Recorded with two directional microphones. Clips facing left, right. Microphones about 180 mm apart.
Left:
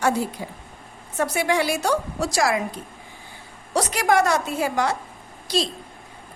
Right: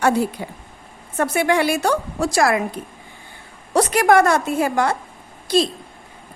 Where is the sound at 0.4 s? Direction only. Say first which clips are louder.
Right 2 dB; 65° right (ahead or behind).